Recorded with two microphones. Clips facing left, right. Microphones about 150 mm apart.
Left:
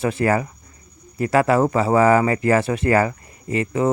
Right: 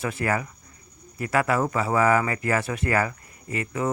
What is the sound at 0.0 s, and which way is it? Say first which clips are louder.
Speech: left 7 dB; 30° left (ahead or behind).